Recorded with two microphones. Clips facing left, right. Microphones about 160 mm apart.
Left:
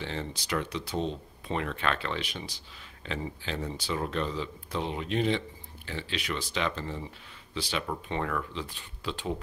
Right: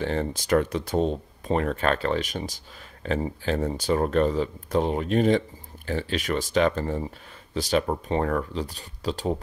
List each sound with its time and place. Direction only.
0.0 s speech: 50° right (ahead or behind)